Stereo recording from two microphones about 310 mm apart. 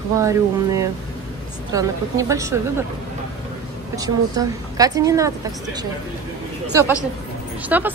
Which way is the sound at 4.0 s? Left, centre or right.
Centre.